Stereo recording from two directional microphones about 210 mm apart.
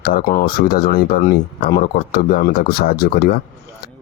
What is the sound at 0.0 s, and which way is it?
Speech, 45° left (ahead or behind).